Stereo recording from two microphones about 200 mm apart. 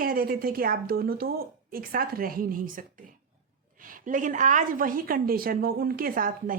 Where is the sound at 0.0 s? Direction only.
45° right (ahead or behind).